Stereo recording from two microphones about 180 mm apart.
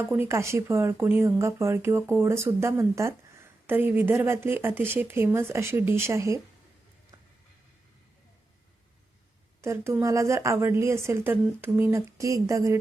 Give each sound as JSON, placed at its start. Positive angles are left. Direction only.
{"t": 0.0, "sound": "speech", "side_deg": -10}
{"t": 9.6, "sound": "speech", "side_deg": -15}